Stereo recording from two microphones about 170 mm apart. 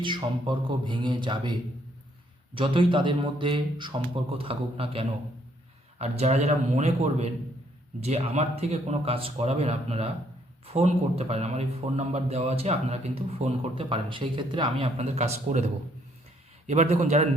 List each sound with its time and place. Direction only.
0.0 s speech: 30° right (ahead or behind)
2.6 s speech: 30° right (ahead or behind)